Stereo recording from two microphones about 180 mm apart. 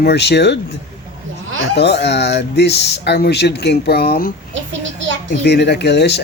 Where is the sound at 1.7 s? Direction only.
70° left (ahead or behind).